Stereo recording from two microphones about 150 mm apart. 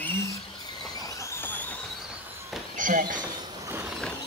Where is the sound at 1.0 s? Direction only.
20° left (ahead or behind).